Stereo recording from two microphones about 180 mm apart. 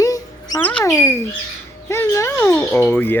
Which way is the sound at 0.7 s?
10° left (ahead or behind).